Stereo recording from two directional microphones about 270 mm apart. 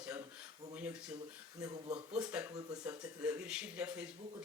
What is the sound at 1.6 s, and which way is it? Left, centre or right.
Speech, centre.